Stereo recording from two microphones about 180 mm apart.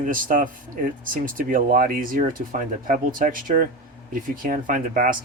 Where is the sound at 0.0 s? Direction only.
50° right (ahead or behind).